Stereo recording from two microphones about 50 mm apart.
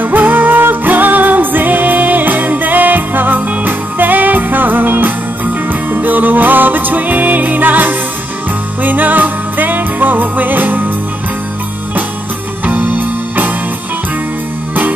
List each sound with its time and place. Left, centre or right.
0.0 s music: right
12.6 s music: right